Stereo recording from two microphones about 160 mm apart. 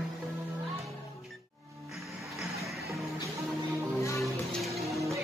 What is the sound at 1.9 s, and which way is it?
Music, centre (ahead or behind).